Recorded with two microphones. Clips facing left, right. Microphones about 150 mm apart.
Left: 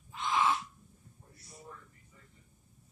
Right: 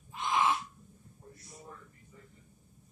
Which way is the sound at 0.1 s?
15° right (ahead or behind).